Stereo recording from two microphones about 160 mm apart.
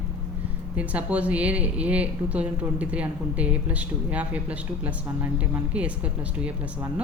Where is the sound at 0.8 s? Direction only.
10° right (ahead or behind).